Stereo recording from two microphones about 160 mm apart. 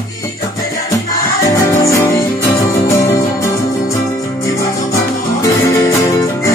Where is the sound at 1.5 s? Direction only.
20° left (ahead or behind).